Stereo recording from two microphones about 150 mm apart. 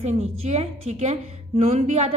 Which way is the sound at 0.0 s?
45° right (ahead or behind).